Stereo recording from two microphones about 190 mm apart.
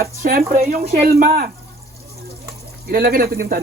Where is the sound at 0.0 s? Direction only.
50° right (ahead or behind).